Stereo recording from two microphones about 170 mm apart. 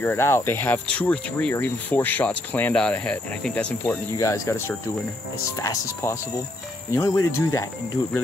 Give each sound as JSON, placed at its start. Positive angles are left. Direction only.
{"t": 0.0, "sound": "speech", "side_deg": 15}